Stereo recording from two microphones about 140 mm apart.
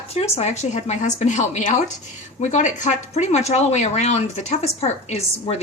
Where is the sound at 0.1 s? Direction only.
45° left (ahead or behind).